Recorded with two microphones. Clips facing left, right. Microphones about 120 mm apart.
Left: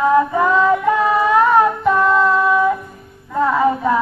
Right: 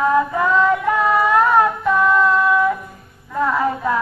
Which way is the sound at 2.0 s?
Centre (ahead or behind).